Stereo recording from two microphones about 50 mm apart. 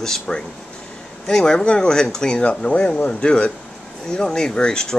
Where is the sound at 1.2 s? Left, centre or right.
Centre.